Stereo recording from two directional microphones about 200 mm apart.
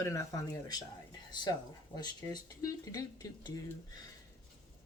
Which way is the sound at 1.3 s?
20° left (ahead or behind).